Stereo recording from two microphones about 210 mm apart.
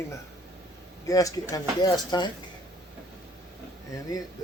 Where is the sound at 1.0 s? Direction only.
15° left (ahead or behind).